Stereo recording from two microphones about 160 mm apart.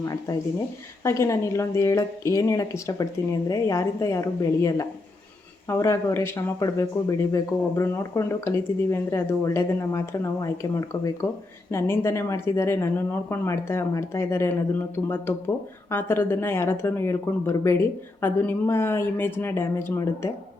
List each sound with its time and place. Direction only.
1.0 s a woman's voice: 15° left (ahead or behind)